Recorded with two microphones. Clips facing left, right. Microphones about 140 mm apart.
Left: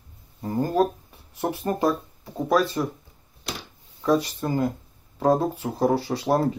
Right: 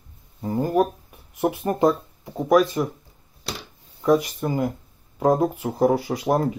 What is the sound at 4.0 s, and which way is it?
Speech, 15° right (ahead or behind).